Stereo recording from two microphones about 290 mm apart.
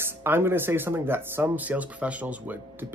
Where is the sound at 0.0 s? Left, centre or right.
Centre.